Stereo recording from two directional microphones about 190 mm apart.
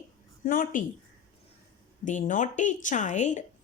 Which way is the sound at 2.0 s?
40° left (ahead or behind).